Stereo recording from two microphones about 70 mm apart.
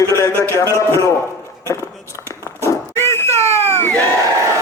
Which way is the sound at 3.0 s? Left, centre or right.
Left.